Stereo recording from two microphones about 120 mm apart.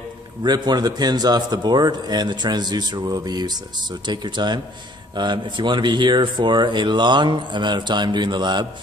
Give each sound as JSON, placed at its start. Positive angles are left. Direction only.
{"t": 0.4, "sound": "speech", "side_deg": -35}